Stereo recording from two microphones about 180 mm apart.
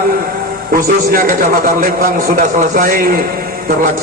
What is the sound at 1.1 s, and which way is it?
A man's voice, 50° right (ahead or behind).